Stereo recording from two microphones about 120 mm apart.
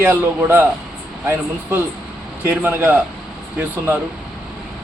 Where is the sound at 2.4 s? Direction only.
20° right (ahead or behind).